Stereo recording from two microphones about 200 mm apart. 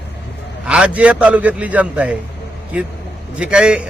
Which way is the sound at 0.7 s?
5° right (ahead or behind).